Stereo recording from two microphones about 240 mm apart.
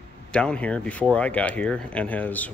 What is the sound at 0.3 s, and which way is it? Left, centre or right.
Speech, centre.